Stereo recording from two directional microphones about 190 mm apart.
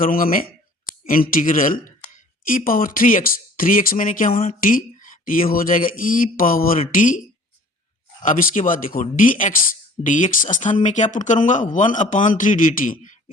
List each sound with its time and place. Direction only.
0.0 s speech: 45° left (ahead or behind)
8.2 s speech: 45° left (ahead or behind)